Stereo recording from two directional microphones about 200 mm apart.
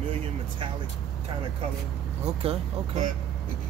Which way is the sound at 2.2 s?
30° right (ahead or behind).